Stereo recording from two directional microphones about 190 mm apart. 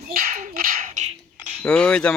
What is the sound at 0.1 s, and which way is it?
Dog, 50° right (ahead or behind).